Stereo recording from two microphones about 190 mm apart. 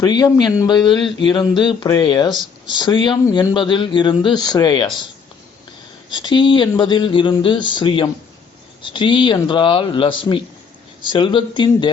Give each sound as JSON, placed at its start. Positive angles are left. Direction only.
{"t": 0.0, "sound": "a man's voice", "side_deg": 20}
{"t": 6.1, "sound": "a man's voice", "side_deg": 25}